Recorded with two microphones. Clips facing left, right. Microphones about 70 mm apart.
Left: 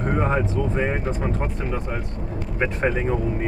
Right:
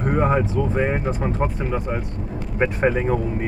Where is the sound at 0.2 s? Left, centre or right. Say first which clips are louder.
Right 4 dB; centre.